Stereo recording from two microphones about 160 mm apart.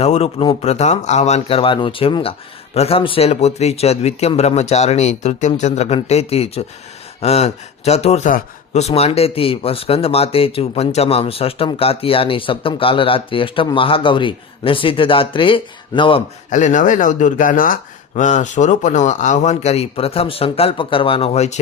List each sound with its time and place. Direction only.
0.0 s speech: 40° left (ahead or behind)
16.5 s speech: 50° left (ahead or behind)